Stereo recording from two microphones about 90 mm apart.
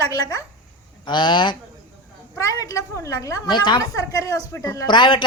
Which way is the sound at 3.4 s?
60° left (ahead or behind).